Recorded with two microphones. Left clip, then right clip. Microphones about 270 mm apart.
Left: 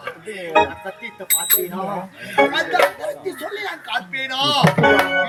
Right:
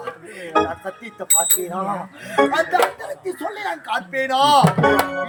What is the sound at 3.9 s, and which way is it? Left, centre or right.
Speech, centre.